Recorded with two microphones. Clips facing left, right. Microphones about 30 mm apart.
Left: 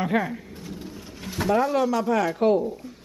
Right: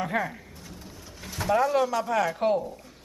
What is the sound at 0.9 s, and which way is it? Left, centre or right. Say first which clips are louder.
Vehicle: left 5 dB; left.